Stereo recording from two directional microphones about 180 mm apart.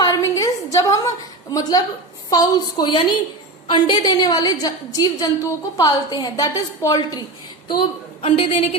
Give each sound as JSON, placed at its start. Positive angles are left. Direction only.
{"t": 0.0, "sound": "a sound", "side_deg": 20}
{"t": 1.5, "sound": "a woman's voice", "side_deg": 20}
{"t": 7.8, "sound": "a woman's voice", "side_deg": 35}